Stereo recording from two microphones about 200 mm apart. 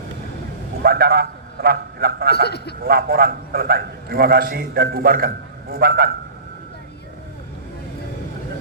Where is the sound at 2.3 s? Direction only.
55° left (ahead or behind).